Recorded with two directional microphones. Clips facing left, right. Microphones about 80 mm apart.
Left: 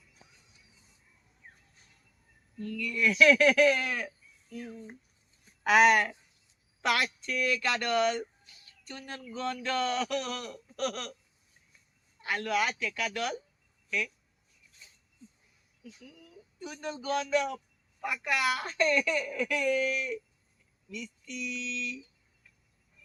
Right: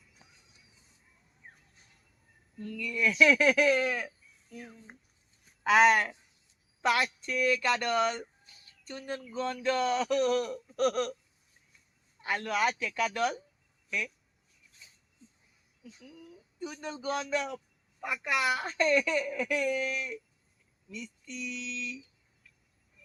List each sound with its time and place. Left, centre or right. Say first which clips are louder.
1.4 s a sound: right 1 dB; centre
2.6 s speech: left 1 dB; centre
4.5 s speech: left 5 dB; centre
5.6 s speech: even; right
12.2 s speech: even; right
16.6 s speech: even; right